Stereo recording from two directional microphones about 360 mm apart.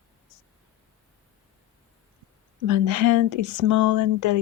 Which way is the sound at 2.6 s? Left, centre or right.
Right.